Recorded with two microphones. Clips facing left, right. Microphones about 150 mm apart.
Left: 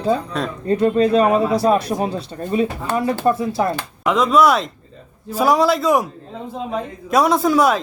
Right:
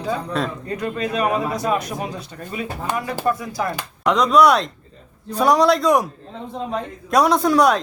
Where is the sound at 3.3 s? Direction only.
25° left (ahead or behind).